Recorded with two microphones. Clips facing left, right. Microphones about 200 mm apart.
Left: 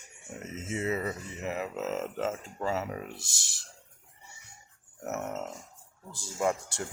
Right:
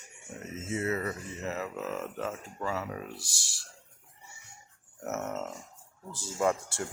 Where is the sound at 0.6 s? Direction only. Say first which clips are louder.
Even; 20° left (ahead or behind).